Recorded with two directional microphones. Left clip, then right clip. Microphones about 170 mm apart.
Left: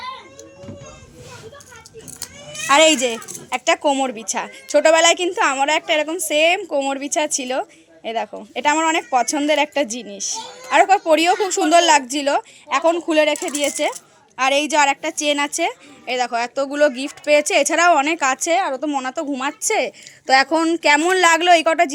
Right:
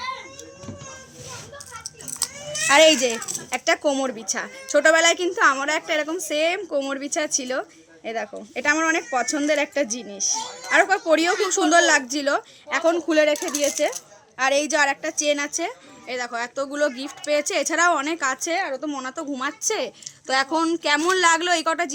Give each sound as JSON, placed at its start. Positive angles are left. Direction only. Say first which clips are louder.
{"t": 2.6, "sound": "a woman's voice", "louder": "left 2 dB", "side_deg": 0}